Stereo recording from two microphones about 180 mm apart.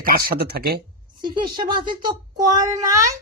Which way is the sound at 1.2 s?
25° right (ahead or behind).